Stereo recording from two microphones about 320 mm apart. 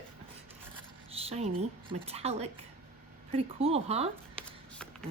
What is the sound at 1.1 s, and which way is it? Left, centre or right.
A woman's voice, centre.